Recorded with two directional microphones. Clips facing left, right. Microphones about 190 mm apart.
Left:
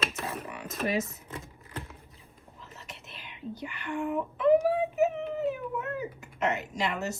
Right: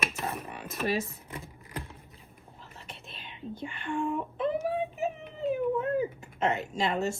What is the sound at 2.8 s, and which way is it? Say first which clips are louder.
Whispering: right 2 dB; 30° right (ahead or behind).